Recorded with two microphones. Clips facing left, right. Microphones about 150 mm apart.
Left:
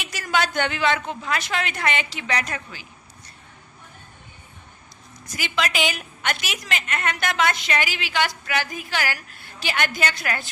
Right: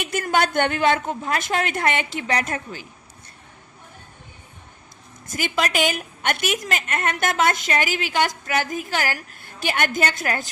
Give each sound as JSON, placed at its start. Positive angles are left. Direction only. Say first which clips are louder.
{"t": 0.0, "sound": "a woman's voice", "louder": "right 3 dB", "side_deg": -55}
{"t": 5.2, "sound": "a woman's voice", "louder": "right 2 dB", "side_deg": -50}